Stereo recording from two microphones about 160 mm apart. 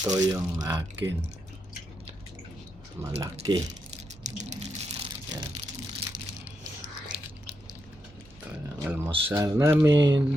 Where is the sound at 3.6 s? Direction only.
45° right (ahead or behind).